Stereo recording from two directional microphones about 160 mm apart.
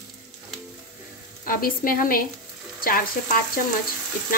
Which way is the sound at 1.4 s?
60° left (ahead or behind).